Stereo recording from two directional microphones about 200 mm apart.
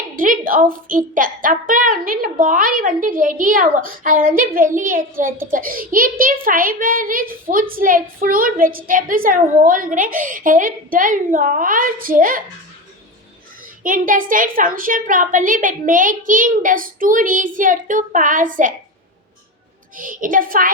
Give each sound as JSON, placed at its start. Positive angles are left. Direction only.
{"t": 0.2, "sound": "a woman's voice", "side_deg": -45}
{"t": 13.8, "sound": "a woman's voice", "side_deg": -40}
{"t": 20.0, "sound": "a woman's voice", "side_deg": -40}